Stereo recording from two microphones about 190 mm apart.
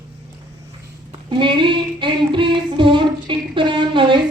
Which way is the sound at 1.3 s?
25° right (ahead or behind).